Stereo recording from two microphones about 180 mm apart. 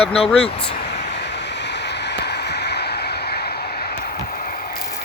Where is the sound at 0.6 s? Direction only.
65° left (ahead or behind); by 5.0 s 45° left (ahead or behind).